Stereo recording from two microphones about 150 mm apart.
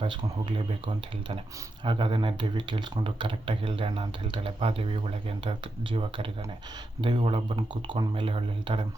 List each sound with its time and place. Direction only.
0.0 s speech: 35° right (ahead or behind)